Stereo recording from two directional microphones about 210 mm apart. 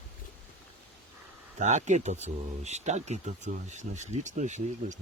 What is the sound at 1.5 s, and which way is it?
Speech, 35° right (ahead or behind).